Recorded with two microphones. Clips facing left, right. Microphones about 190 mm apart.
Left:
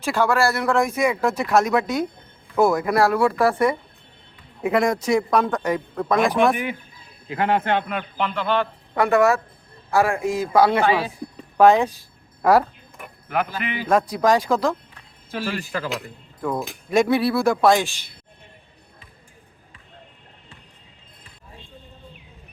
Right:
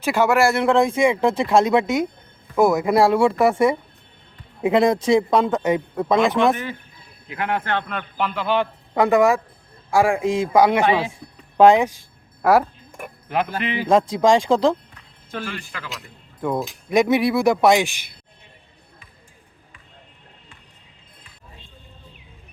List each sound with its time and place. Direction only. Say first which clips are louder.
0.1 s a man's voice: right 3 dB; 20° right (ahead or behind)
7.3 s speech: left 3 dB; 25° left (ahead or behind)
8.2 s a man's voice: right 1 dB; 5° right (ahead or behind)
13.2 s a man's voice: right 2 dB; 25° right (ahead or behind)
15.4 s speech: left 6 dB; 35° left (ahead or behind)
16.9 s a man's voice: right 1 dB; 15° right (ahead or behind)